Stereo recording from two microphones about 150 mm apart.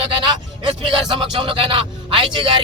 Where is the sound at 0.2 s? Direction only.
35° right (ahead or behind).